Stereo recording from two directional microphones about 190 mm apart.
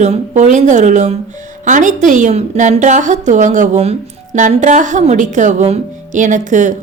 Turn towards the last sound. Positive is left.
turn(degrees=-40)  # may be behind; listen again after turning